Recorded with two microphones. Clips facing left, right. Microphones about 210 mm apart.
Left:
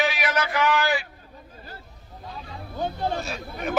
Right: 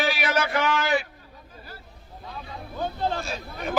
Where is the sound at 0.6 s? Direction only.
25° right (ahead or behind).